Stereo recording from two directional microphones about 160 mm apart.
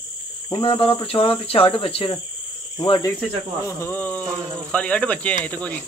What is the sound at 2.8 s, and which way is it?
Speech, 20° left (ahead or behind).